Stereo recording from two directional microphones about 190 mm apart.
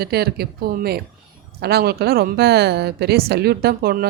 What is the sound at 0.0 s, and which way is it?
A woman's voice, 60° right (ahead or behind).